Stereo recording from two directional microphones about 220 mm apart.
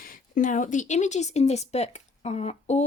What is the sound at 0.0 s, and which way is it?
A woman's voice, 40° left (ahead or behind).